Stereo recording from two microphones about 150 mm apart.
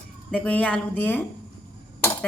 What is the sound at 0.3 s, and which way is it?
Speech, 10° left (ahead or behind).